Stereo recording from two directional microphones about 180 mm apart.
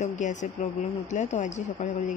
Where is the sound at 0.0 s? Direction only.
40° left (ahead or behind).